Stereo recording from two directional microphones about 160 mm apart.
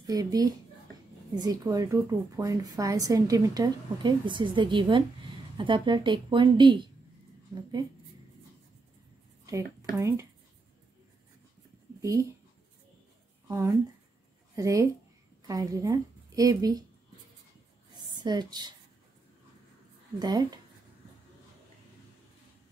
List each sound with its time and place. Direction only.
0.0 s a woman's voice: 20° right (ahead or behind)
9.8 s speech: 20° right (ahead or behind)
12.0 s speech: 20° right (ahead or behind)
13.5 s a woman's voice: 20° right (ahead or behind)
17.9 s a sound: 25° right (ahead or behind)
20.2 s a woman's voice: 25° right (ahead or behind)